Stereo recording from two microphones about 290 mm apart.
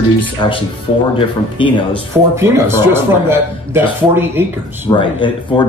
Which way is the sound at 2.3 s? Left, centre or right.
Centre.